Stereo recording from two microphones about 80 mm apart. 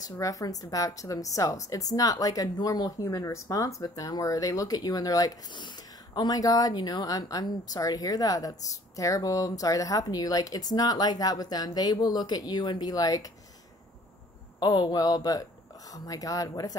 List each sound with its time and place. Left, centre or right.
0.2 s speech: left
5.5 s speech: left
14.6 s speech: left